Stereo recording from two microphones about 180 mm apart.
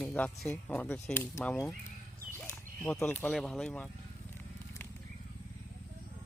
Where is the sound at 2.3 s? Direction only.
10° left (ahead or behind).